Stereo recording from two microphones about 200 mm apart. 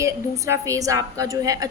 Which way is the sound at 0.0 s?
15° right (ahead or behind).